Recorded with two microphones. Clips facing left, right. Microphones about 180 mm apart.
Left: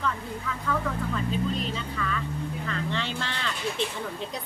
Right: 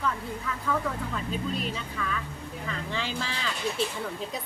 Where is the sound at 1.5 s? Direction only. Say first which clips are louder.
Left 1 dB; 5° right (ahead or behind).